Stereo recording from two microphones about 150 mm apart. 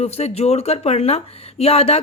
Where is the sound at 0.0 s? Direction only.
45° left (ahead or behind).